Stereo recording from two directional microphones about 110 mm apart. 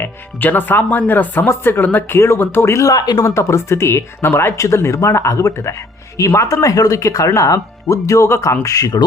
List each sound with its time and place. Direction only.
0.0 s speech: 15° left (ahead or behind); by 9.0 s 35° left (ahead or behind)